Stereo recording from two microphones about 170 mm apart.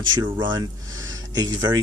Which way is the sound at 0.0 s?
25° right (ahead or behind).